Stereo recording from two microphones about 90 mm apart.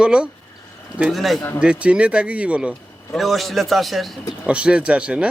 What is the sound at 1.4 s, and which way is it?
Speech, 30° left (ahead or behind).